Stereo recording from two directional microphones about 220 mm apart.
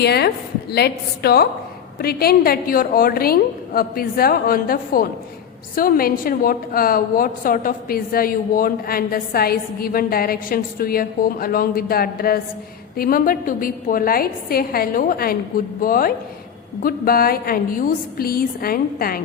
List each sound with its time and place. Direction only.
0.0 s a woman's voice: 50° left (ahead or behind)